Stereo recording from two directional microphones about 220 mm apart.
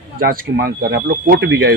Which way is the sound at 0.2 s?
40° right (ahead or behind).